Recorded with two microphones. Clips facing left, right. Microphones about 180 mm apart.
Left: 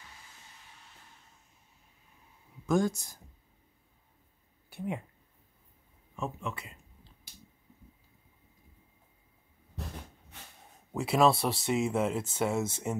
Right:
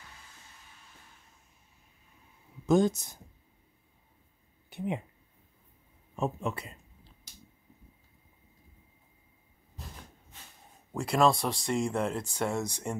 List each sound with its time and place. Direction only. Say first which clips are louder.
2.6 s speech: right 4 dB; 20° right (ahead or behind)
4.6 s speech: right 2 dB; 20° right (ahead or behind)
6.1 s speech: right 5 dB; 35° right (ahead or behind)
10.9 s speech: even; 5° left (ahead or behind)